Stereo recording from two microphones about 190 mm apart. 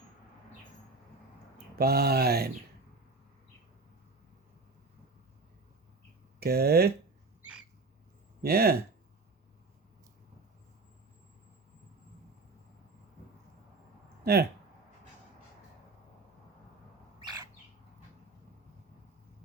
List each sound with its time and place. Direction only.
1.8 s speech: 55° right (ahead or behind)
6.4 s speech: 55° right (ahead or behind)
8.4 s speech: 55° right (ahead or behind)
14.3 s speech: 55° right (ahead or behind)
17.2 s bird: 20° right (ahead or behind)